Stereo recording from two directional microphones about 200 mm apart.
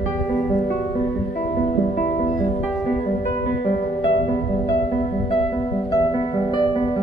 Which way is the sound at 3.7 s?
50° left (ahead or behind).